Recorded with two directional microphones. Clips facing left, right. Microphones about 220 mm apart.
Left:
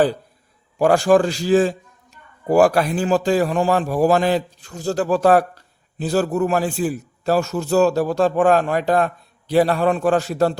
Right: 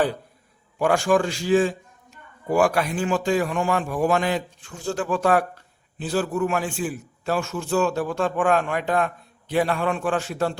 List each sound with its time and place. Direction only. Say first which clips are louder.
0.8 s a man's voice: left 5 dB; 35° left (ahead or behind)